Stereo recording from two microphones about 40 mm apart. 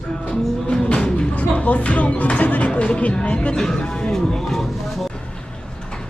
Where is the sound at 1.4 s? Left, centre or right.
Left.